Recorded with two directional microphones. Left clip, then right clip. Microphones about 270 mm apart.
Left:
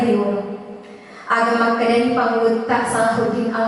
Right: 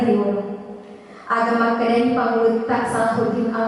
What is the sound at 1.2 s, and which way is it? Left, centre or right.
A woman's voice, centre.